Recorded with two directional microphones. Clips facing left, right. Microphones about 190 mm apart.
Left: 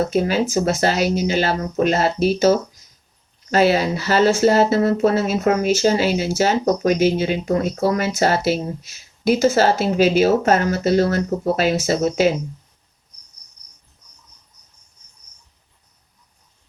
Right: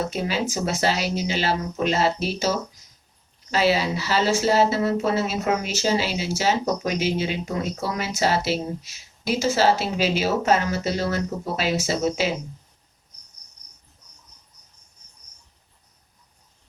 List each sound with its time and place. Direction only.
0.1 s speech: 50° left (ahead or behind)